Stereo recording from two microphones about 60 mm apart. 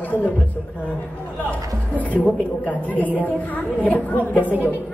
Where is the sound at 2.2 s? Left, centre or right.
Left.